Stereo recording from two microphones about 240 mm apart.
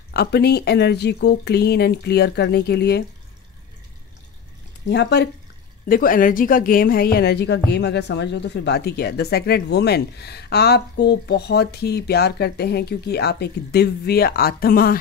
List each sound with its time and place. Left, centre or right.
0.1 s a woman's voice: left
4.8 s a woman's voice: left